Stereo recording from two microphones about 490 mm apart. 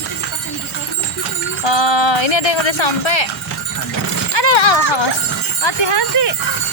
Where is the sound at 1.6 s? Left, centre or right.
Left.